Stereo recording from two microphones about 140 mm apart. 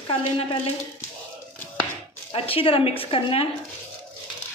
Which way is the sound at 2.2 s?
40° left (ahead or behind).